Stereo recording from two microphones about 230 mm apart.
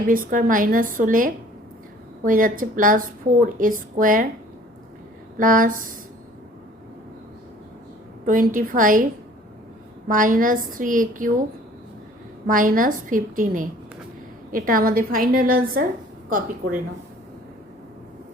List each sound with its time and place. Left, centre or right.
0.1 s a woman's voice: right
5.4 s a woman's voice: right
8.2 s a woman's voice: right
10.1 s a woman's voice: right
12.5 s a woman's voice: right